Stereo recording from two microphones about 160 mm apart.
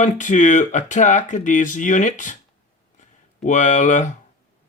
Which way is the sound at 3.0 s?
50° left (ahead or behind).